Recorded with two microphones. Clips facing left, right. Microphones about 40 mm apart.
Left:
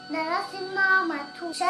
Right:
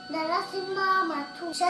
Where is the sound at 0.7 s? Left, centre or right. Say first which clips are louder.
Left 4 dB; centre.